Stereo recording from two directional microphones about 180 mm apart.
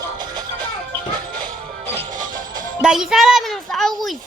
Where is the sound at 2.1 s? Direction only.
45° right (ahead or behind).